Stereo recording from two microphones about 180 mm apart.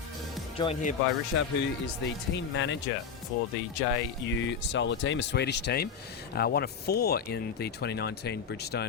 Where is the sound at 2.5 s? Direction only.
90° left.